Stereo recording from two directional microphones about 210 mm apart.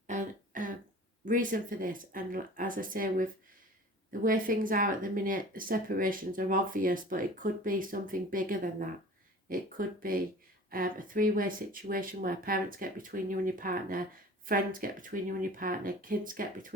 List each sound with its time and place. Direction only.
0.1 s throat clearing: 40° right (ahead or behind)
1.2 s speech: 40° right (ahead or behind)